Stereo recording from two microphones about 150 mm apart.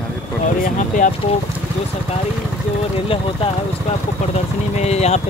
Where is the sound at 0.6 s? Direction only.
65° left (ahead or behind).